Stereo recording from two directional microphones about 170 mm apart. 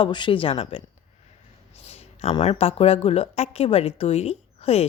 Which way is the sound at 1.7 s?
35° left (ahead or behind).